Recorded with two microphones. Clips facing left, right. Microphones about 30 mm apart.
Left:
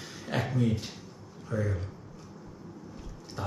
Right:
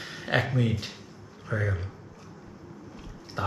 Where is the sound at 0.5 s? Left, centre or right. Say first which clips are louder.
Right 1 dB; right.